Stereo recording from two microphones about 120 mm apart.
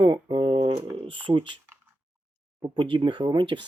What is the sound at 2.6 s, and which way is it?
Speech, 40° right (ahead or behind).